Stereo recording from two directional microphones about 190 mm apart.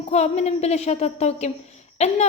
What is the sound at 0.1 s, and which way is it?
A woman's voice, 35° left (ahead or behind).